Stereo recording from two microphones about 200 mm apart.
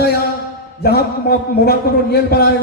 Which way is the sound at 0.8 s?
55° left (ahead or behind).